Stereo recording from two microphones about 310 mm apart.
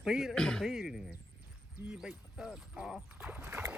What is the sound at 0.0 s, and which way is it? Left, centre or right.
Speech, centre.